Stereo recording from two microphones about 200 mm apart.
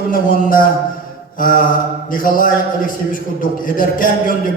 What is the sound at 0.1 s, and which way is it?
A man's voice, 45° left (ahead or behind).